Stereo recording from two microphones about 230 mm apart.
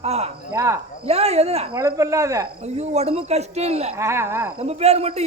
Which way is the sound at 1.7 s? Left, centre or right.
Centre.